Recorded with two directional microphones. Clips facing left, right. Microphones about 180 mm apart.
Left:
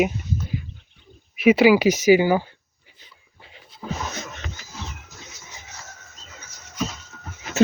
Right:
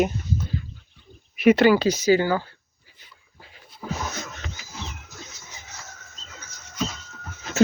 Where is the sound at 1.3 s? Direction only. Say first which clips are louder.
Left 1 dB; 5° left (ahead or behind).